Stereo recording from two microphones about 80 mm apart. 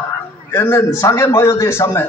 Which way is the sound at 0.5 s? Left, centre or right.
Left.